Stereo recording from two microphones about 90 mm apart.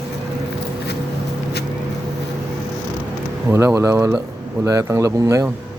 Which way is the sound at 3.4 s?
30° right (ahead or behind).